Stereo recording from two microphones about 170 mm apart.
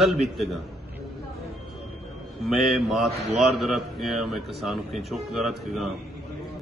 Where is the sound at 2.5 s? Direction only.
Centre (ahead or behind).